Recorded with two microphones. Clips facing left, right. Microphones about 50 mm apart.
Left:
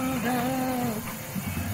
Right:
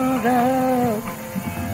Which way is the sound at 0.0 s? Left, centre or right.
Right.